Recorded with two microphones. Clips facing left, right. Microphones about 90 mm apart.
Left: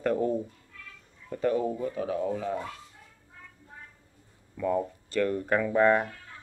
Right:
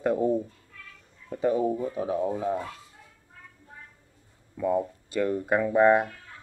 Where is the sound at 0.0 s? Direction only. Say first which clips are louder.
Right 2 dB; 15° right (ahead or behind).